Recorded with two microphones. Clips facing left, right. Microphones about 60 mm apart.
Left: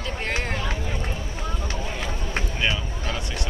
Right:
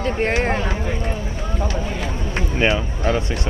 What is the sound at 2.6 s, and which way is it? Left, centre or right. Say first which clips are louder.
Speech: right 10 dB; right.